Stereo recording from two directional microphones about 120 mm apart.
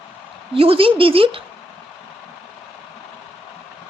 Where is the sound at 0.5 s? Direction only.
55° right (ahead or behind).